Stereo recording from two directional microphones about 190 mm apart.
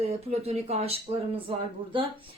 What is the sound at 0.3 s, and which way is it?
Speech, 35° right (ahead or behind).